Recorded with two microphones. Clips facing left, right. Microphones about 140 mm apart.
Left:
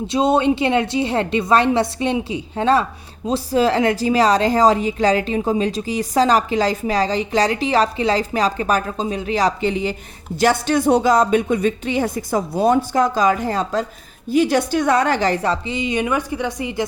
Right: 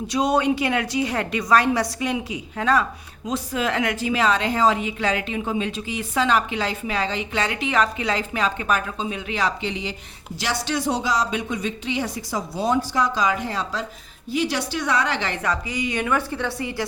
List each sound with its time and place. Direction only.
0.1 s a woman's voice: 25° left (ahead or behind)